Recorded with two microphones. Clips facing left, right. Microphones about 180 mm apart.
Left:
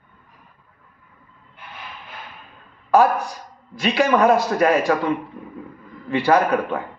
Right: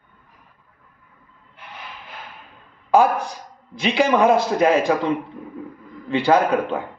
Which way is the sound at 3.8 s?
20° right (ahead or behind).